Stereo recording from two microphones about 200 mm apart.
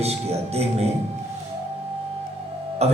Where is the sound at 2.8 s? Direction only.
30° right (ahead or behind).